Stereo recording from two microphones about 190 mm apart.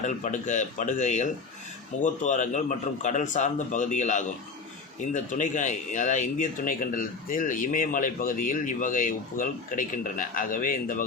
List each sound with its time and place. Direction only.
0.0 s a man's voice: 40° left (ahead or behind)